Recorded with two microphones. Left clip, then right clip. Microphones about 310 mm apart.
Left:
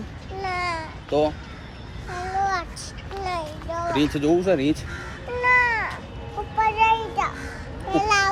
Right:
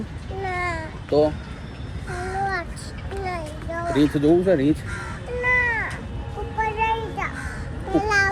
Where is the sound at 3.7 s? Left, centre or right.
Left.